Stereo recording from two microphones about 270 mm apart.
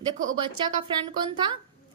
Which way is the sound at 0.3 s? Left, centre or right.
Centre.